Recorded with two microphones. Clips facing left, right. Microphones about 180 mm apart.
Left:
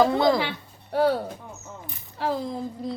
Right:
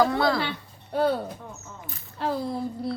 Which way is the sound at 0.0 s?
20° left (ahead or behind).